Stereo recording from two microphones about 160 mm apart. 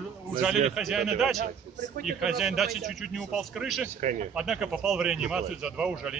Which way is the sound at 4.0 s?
50° right (ahead or behind).